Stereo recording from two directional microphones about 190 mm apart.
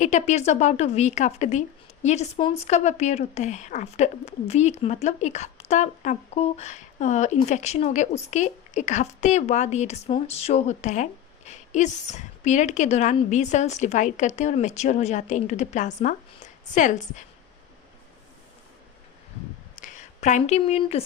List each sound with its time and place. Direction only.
0.0 s speech: 40° left (ahead or behind)
19.8 s speech: 40° left (ahead or behind)